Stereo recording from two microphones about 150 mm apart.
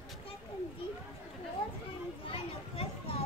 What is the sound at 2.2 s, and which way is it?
Children playing, 40° left (ahead or behind).